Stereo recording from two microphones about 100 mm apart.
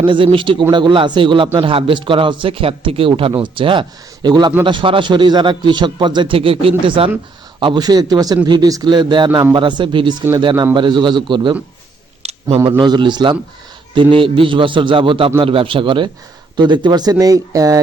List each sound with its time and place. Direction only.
0.0 s speech: 55° right (ahead or behind)
4.6 s speech: 55° right (ahead or behind)
7.6 s speech: 45° right (ahead or behind)
12.2 s a sound: 90° right
12.8 s speech: 50° right (ahead or behind)